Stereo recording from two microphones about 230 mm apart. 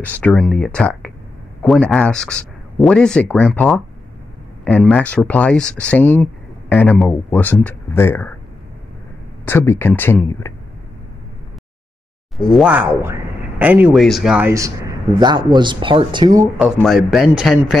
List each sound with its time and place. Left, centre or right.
0.0 s speech: centre
9.5 s speech: centre
12.4 s speech: centre
14.5 s speech: centre
16.5 s speech: centre